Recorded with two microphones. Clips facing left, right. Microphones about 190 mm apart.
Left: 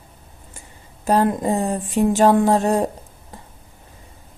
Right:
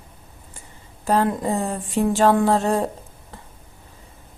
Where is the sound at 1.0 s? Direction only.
15° left (ahead or behind).